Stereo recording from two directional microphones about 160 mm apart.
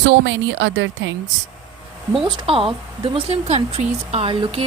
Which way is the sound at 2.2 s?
35° right (ahead or behind).